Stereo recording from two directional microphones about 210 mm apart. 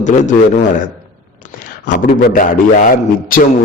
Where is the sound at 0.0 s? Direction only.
35° left (ahead or behind).